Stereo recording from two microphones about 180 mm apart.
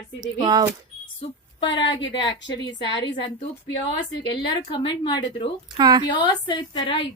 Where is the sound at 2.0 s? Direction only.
90° left.